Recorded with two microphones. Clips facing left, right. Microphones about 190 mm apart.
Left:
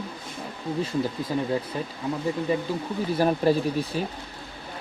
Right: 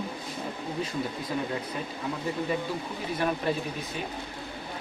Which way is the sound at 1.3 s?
30° left (ahead or behind).